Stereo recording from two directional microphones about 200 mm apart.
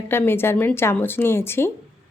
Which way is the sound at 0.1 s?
10° left (ahead or behind).